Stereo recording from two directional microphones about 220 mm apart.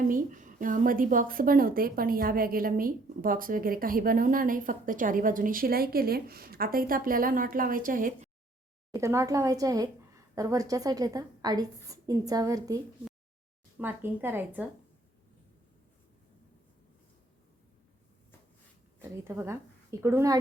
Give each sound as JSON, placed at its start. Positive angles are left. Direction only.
{"t": 0.1, "sound": "a woman's voice", "side_deg": -35}
{"t": 8.9, "sound": "a woman's voice", "side_deg": -15}
{"t": 19.4, "sound": "a woman's voice", "side_deg": -10}